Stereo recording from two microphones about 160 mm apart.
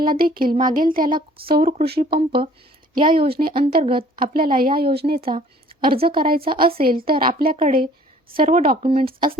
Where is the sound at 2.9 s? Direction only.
30° right (ahead or behind).